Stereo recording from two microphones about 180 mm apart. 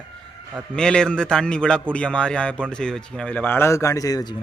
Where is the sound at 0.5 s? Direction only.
5° left (ahead or behind).